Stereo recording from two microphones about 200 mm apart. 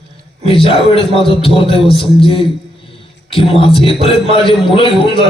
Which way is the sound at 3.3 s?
30° left (ahead or behind).